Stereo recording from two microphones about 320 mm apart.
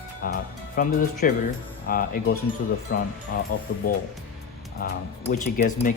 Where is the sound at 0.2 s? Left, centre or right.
Left.